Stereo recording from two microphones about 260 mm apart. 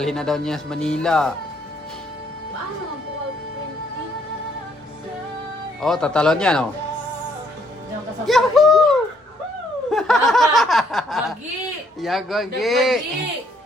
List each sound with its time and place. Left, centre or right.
0.0 s speech: centre
5.8 s speech: centre
8.3 s a sound: centre
9.9 s speech: centre